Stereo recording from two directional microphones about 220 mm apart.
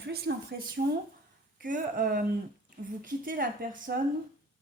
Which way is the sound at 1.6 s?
40° right (ahead or behind).